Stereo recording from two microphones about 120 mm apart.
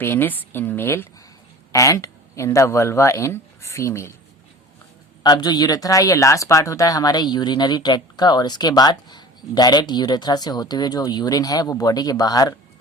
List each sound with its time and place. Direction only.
0.0 s a man's voice: 20° left (ahead or behind)
5.2 s speech: 35° left (ahead or behind)